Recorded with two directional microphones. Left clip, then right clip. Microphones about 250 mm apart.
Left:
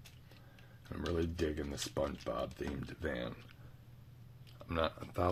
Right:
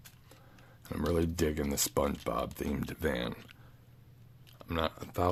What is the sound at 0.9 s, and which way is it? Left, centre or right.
Speech, right.